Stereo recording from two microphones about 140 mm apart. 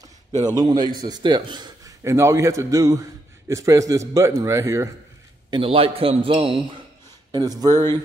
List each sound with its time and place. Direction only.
0.3 s a man's voice: 30° right (ahead or behind)
2.0 s a man's voice: 20° right (ahead or behind)
5.5 s a man's voice: 40° right (ahead or behind)
7.3 s a man's voice: 30° right (ahead or behind)